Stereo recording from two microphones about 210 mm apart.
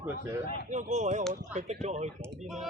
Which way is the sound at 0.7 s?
35° right (ahead or behind).